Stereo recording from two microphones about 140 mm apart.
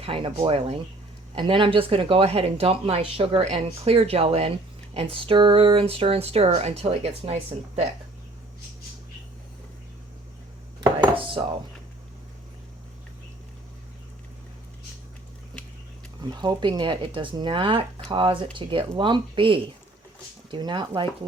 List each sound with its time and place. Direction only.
0.0 s speech: 40° right (ahead or behind)
11.1 s chopping: 40° right (ahead or behind)
16.3 s speech: 30° right (ahead or behind)